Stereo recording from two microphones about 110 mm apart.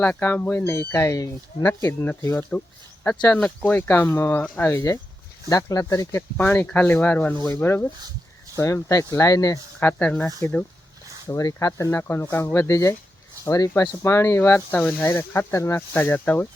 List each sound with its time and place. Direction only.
0.0 s speech: 15° left (ahead or behind); by 6.2 s 30° left (ahead or behind)
6.3 s speech: 15° left (ahead or behind); by 9.6 s 30° left (ahead or behind)
9.8 s speech: 15° left (ahead or behind)
11.3 s speech: 30° left (ahead or behind)